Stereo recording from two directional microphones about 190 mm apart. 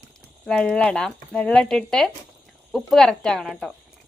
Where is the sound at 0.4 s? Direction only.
5° left (ahead or behind).